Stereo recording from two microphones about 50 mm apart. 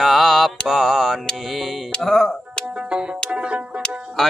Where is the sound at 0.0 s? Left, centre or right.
Centre.